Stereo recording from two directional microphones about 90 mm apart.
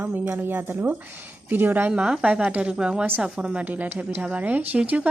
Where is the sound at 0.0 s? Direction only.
20° right (ahead or behind).